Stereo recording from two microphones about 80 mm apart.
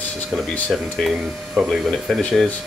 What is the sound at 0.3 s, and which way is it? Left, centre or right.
Speech, centre.